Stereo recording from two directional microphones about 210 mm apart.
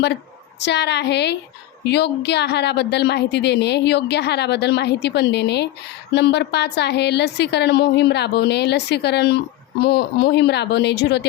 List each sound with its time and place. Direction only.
0.6 s a woman's voice: 55° left (ahead or behind)